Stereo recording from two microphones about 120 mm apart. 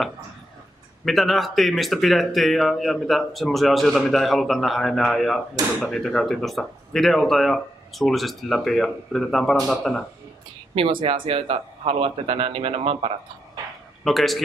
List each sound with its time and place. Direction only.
1.0 s speech: centre (ahead or behind)
10.7 s speech: 45° right (ahead or behind)
14.0 s speech: centre (ahead or behind)